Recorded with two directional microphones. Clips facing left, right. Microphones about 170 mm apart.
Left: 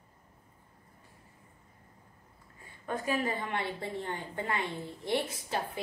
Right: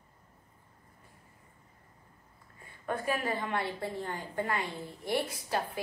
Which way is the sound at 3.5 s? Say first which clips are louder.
Right 1 dB; 25° left (ahead or behind).